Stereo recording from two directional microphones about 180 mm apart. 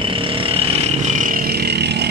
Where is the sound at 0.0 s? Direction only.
30° right (ahead or behind).